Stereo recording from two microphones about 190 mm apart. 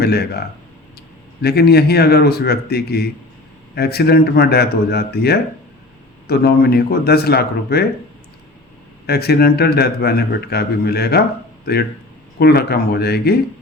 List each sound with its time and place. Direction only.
0.0 s a man's voice: 60° left (ahead or behind)
9.0 s a man's voice: 60° left (ahead or behind)